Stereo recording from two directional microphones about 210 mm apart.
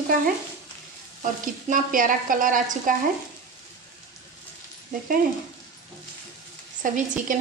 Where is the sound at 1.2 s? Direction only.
40° right (ahead or behind).